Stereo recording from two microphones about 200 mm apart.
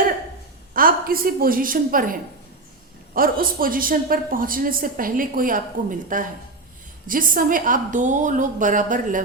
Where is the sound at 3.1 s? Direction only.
45° right (ahead or behind).